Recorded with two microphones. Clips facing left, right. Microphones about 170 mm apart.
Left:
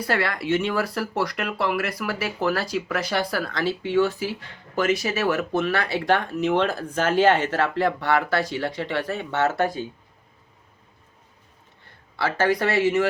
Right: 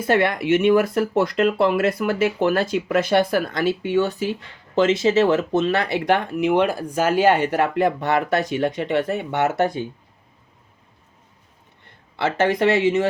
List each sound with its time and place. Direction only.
0.0 s speech: 20° right (ahead or behind)
12.1 s speech: 20° right (ahead or behind)